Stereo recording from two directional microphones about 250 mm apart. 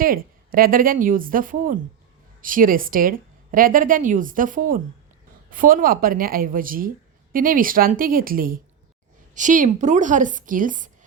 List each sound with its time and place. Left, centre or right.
0.0 s speech: right